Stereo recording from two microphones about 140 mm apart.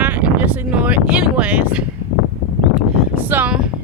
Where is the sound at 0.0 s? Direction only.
10° right (ahead or behind).